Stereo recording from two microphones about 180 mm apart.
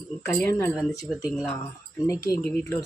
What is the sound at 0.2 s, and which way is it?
Speech, 15° left (ahead or behind).